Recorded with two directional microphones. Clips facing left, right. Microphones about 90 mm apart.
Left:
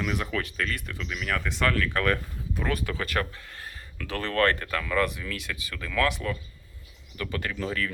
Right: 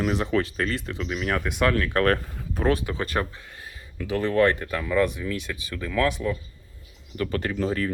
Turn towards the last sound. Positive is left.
turn(degrees=-35)  # may be behind; listen again after turning